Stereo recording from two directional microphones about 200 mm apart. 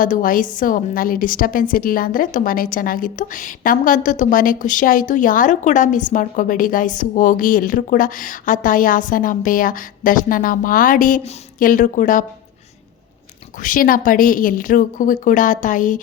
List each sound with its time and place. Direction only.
0.0 s a woman's voice: 40° left (ahead or behind)
13.6 s a woman's voice: 40° left (ahead or behind)